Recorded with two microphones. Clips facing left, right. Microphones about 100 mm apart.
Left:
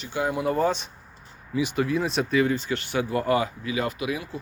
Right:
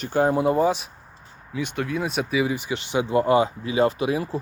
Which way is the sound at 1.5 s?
5° left (ahead or behind).